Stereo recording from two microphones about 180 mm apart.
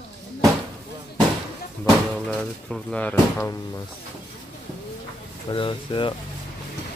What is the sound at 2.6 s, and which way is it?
Speech, 5° left (ahead or behind).